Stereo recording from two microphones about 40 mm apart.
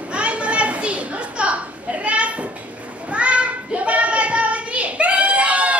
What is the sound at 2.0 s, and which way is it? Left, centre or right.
Children playing, right.